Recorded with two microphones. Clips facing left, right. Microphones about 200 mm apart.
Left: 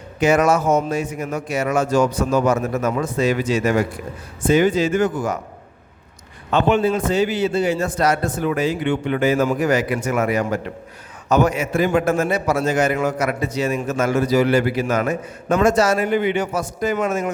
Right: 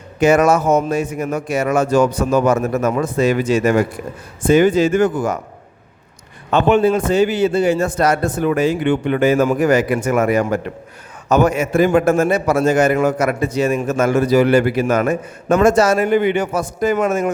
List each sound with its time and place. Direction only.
0.2 s a man's voice: 45° right (ahead or behind)
6.5 s a man's voice: 55° right (ahead or behind)